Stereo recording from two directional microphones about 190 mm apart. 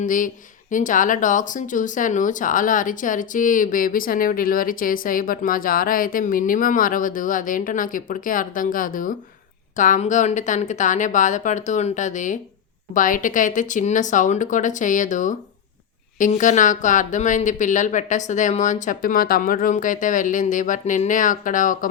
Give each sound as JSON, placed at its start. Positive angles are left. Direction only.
{"t": 0.0, "sound": "speech", "side_deg": 45}